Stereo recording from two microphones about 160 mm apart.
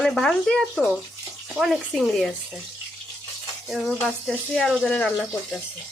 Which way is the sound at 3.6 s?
Centre (ahead or behind).